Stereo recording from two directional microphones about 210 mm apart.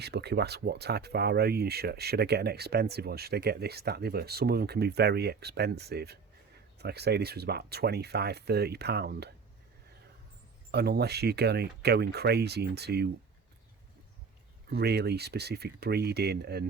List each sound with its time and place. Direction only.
0.0 s speech: 50° right (ahead or behind)
10.7 s speech: 50° right (ahead or behind)
14.7 s speech: 50° right (ahead or behind)